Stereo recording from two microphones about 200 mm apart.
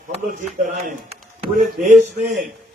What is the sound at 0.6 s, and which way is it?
A man's voice, 35° right (ahead or behind).